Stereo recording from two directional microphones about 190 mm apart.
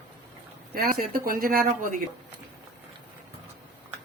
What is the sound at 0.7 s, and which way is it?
Speech, 50° right (ahead or behind).